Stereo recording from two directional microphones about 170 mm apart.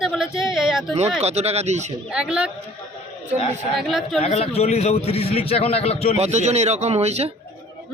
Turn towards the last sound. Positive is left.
turn(degrees=-40)  # may be behind; listen again after turning